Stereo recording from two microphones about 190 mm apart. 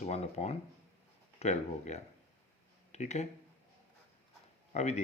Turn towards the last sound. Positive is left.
turn(degrees=35)  # may be behind; listen again after turning